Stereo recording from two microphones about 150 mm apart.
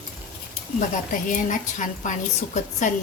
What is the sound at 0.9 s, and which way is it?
A woman's voice, 60° left (ahead or behind).